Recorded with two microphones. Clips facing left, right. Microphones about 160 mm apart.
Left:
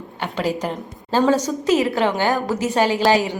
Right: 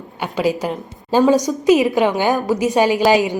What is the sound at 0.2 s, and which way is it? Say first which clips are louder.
A woman's voice: right 4 dB; 10° right (ahead or behind).